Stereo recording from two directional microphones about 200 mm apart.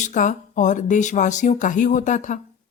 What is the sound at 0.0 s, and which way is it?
Speech, 40° left (ahead or behind).